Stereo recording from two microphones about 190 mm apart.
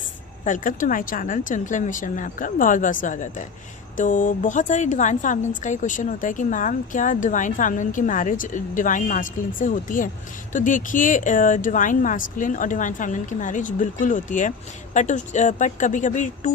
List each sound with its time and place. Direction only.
0.4 s a woman's voice: 45° left (ahead or behind)